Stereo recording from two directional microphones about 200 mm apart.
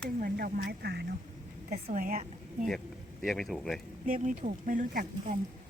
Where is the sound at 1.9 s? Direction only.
40° right (ahead or behind).